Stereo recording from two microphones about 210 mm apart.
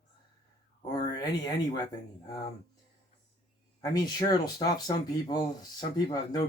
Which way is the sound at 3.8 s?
20° left (ahead or behind).